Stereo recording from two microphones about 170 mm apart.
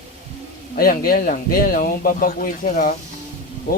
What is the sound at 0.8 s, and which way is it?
Speech, 60° left (ahead or behind).